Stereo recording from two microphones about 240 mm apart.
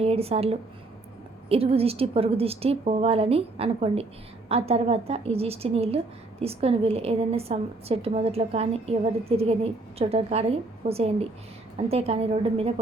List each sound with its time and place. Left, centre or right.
0.0 s a woman's voice: right